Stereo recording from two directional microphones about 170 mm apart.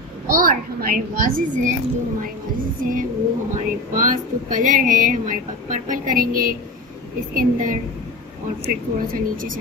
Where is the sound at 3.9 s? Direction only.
50° right (ahead or behind).